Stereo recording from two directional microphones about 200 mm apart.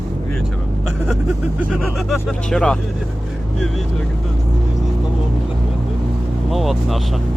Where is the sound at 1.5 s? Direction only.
Centre (ahead or behind).